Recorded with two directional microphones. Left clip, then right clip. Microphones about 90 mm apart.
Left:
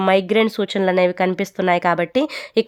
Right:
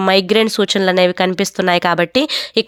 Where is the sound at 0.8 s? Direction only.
20° right (ahead or behind).